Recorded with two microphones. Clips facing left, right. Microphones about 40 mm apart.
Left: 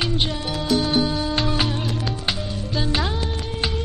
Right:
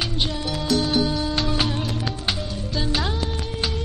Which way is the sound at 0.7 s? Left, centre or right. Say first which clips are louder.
Left 1 dB; centre.